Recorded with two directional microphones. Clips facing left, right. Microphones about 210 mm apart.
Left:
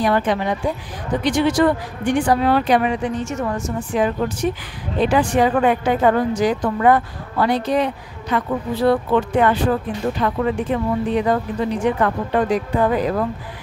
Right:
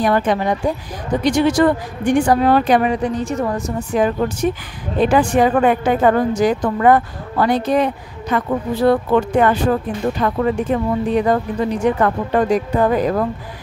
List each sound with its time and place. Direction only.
0.0 s a woman's voice: 45° right (ahead or behind)